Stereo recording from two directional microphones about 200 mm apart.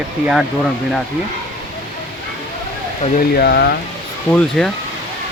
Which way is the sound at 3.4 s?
55° left (ahead or behind).